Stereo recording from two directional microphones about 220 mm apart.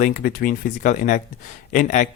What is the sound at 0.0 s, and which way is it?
Speech, 40° left (ahead or behind).